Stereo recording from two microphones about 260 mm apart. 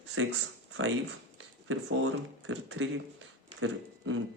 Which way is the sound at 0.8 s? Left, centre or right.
Right.